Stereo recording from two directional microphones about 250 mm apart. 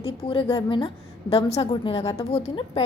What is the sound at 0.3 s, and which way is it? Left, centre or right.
A woman's voice, centre.